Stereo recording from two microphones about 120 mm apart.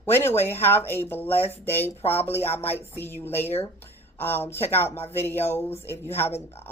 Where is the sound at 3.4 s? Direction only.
60° left (ahead or behind).